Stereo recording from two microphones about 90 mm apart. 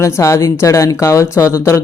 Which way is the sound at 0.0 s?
35° left (ahead or behind).